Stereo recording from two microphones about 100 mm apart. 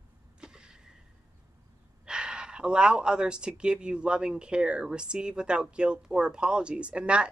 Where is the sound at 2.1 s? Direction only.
10° right (ahead or behind).